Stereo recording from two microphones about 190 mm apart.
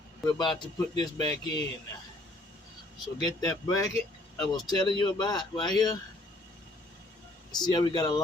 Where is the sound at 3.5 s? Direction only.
20° left (ahead or behind).